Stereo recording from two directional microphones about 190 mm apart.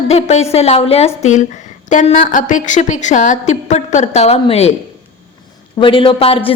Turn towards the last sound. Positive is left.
turn(degrees=30)  # may be behind; listen again after turning